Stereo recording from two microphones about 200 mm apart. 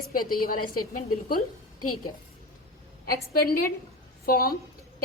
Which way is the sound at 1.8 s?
90° left.